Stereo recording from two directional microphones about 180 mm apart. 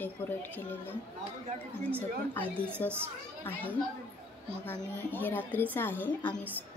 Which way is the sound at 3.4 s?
10° left (ahead or behind).